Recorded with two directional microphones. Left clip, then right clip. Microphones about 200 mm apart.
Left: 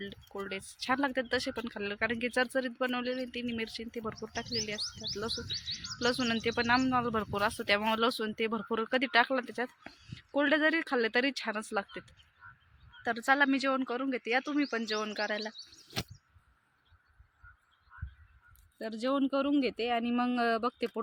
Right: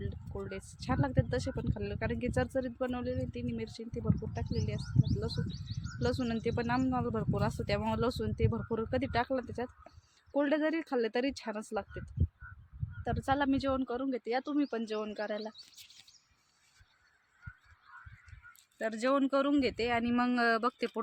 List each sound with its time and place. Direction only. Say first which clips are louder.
0.0 s speech: left 2 dB; centre (ahead or behind)
5.5 s speech: left 10 dB; 50° right (ahead or behind)
6.0 s speech: left 3 dB; centre (ahead or behind)
18.8 s speech: right 2 dB; 20° right (ahead or behind); by 21.0 s centre (ahead or behind)